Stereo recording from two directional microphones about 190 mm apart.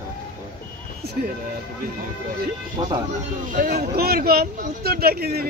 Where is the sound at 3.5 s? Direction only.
50° right (ahead or behind).